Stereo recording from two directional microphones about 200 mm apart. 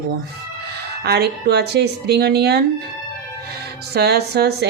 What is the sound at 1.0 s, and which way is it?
Speech, 55° right (ahead or behind).